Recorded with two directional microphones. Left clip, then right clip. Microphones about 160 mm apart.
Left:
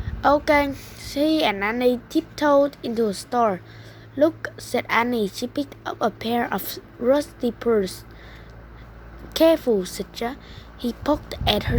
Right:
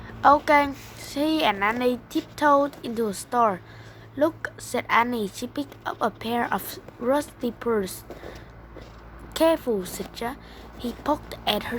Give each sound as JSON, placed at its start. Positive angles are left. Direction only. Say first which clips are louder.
{"t": 0.2, "sound": "a woman's voice", "louder": "right 1 dB", "side_deg": 25}
{"t": 9.3, "sound": "a woman's voice", "louder": "left 4 dB", "side_deg": 30}